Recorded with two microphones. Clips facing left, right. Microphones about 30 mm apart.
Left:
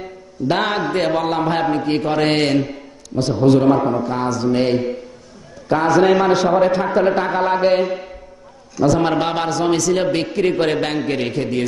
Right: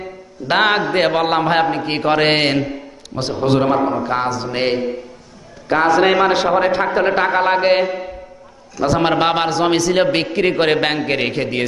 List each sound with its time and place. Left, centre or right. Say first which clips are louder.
0.5 s a man's voice: right 4 dB; right
0.9 s a man's voice: right 3 dB; right
3.8 s a man's voice: even; centre
4.1 s a man's voice: left 1 dB; right
5.9 s a man's voice: even; right
8.8 s a man's voice: right 1 dB; right